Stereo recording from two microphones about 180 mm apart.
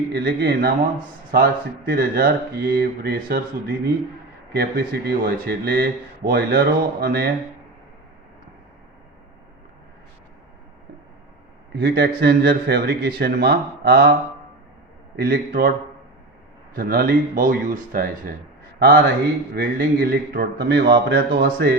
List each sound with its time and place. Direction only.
0.1 s speech: 65° right (ahead or behind)
1.3 s speech: 55° right (ahead or behind)
11.7 s speech: 60° right (ahead or behind)
16.7 s speech: 50° right (ahead or behind)
19.5 s speech: 55° right (ahead or behind)